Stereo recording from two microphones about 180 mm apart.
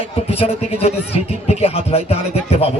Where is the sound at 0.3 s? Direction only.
35° left (ahead or behind).